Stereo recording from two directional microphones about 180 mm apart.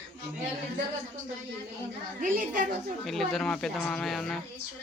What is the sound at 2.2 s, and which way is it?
Speech, 45° right (ahead or behind).